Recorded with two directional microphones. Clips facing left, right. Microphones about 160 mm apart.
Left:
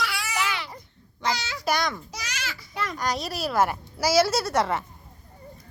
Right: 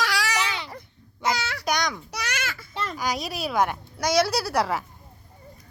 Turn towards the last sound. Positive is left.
turn(degrees=0)  # may be behind; listen again after turning